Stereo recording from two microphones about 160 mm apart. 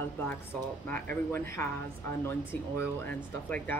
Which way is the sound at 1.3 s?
15° left (ahead or behind).